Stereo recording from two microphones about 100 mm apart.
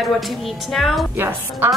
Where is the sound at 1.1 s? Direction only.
20° right (ahead or behind).